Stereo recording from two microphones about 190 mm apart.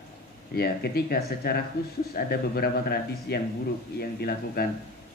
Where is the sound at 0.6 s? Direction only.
55° left (ahead or behind).